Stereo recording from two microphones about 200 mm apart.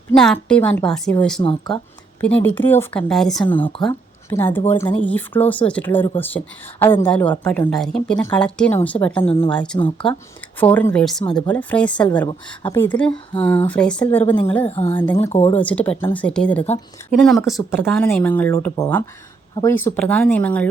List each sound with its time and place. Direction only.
0.4 s speech: 5° left (ahead or behind)
1.4 s speech: 25° left (ahead or behind)
2.2 s speech: 10° left (ahead or behind)
3.7 s speech: 25° left (ahead or behind)
4.3 s speech: 10° left (ahead or behind)
9.7 s speech: 25° left (ahead or behind)
10.8 s speech: 5° left (ahead or behind)
14.7 s speech: 30° left (ahead or behind)
14.9 s speech: 10° left (ahead or behind)
15.3 s speech: 30° left (ahead or behind)
15.5 s speech: 5° left (ahead or behind)